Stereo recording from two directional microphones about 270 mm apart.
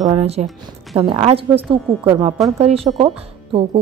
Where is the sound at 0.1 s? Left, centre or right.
Right.